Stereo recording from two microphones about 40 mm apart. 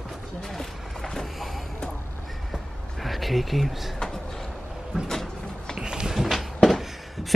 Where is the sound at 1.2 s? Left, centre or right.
Centre.